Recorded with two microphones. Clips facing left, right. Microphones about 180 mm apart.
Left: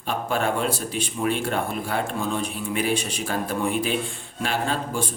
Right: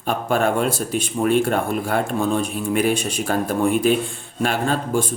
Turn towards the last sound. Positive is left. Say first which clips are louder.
# right 5 dB
turn(degrees=-50)  # may be behind; listen again after turning